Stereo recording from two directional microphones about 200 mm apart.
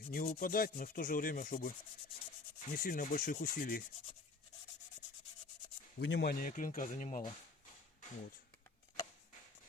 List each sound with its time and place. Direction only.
0.1 s rub: 40° left (ahead or behind)
5.0 s sanding: 5° left (ahead or behind)
6.0 s rub: 55° left (ahead or behind)
6.5 s speech: 40° left (ahead or behind)